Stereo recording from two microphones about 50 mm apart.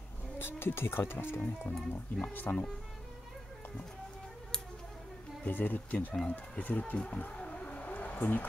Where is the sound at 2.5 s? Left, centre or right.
Left.